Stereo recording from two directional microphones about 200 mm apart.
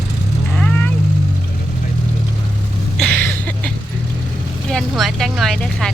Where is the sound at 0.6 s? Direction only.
10° left (ahead or behind).